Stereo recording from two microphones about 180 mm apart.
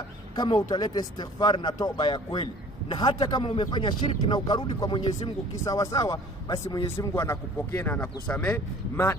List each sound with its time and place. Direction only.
0.4 s speech: 25° left (ahead or behind)